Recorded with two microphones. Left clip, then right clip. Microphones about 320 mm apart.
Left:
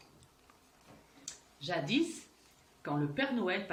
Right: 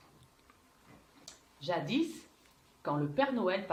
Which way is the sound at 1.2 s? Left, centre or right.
Centre.